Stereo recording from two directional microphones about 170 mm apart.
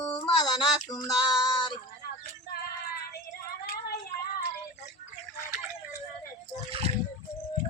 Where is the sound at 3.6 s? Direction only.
65° left (ahead or behind).